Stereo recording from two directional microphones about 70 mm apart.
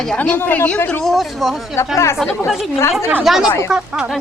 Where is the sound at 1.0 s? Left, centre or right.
Centre.